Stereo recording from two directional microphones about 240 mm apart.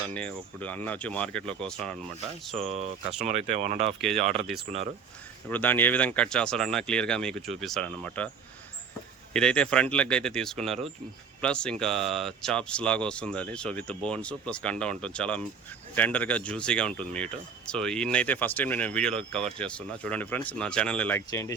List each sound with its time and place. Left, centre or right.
0.1 s speech: centre
2.6 s speech: right
5.5 s speech: centre
9.3 s speech: centre